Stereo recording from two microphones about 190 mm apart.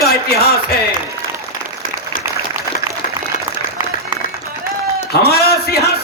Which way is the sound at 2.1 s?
45° left (ahead or behind).